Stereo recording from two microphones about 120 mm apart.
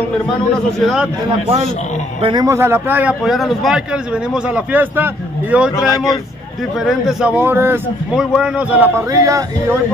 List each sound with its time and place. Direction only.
0.7 s speech: centre (ahead or behind)
2.4 s a man's voice: 20° right (ahead or behind)
3.3 s a man's voice: centre (ahead or behind)
5.8 s speech: 30° left (ahead or behind)
6.8 s speech: centre (ahead or behind)
7.3 s a man's voice: 20° right (ahead or behind)
8.2 s a man's voice: 5° right (ahead or behind)
9.1 s a man's voice: 25° right (ahead or behind)